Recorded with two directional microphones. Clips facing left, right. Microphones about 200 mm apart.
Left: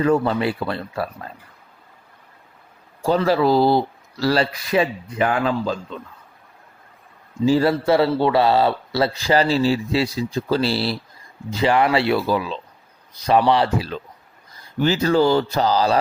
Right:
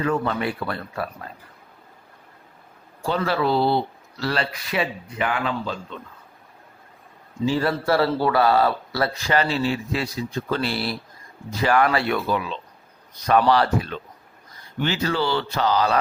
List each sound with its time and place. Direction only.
0.0 s speech: 35° left (ahead or behind)
3.2 s speech: 35° left (ahead or behind)
7.4 s speech: 35° left (ahead or behind)
7.9 s speech: 20° left (ahead or behind)
14.8 s speech: 40° left (ahead or behind)